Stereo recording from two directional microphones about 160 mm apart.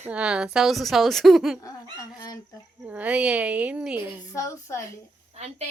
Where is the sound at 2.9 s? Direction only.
10° right (ahead or behind).